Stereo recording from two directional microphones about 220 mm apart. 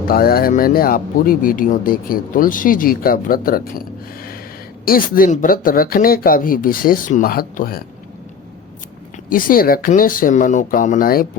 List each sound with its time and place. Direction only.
0.1 s speech: 45° left (ahead or behind)
9.3 s speech: 40° left (ahead or behind)